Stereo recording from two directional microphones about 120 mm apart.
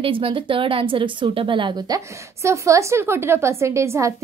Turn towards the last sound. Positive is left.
turn(degrees=-25)  # may be behind; listen again after turning